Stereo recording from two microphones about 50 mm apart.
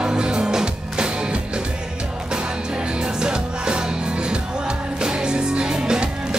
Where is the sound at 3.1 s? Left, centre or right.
Centre.